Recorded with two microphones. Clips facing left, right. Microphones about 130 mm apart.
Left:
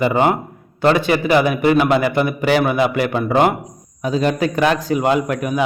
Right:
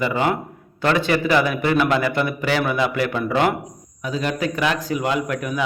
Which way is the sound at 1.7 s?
40° left (ahead or behind).